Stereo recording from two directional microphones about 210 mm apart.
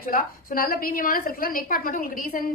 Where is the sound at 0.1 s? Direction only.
45° left (ahead or behind).